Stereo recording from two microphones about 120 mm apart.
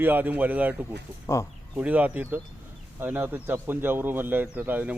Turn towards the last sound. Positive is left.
turn(degrees=-15)  # may be behind; listen again after turning